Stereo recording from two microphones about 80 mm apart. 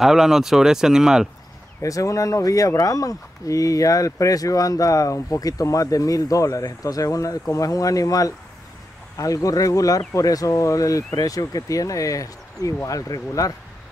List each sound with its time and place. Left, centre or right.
0.0 s speech: centre
1.8 s speech: left